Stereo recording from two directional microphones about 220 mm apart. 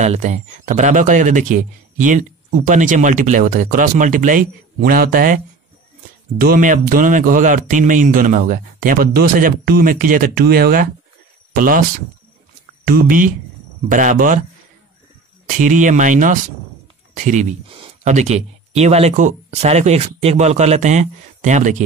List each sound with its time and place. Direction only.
0.0 s speech: 30° right (ahead or behind)
6.4 s speech: 40° right (ahead or behind)
12.8 s speech: 40° right (ahead or behind)
15.4 s speech: 35° right (ahead or behind)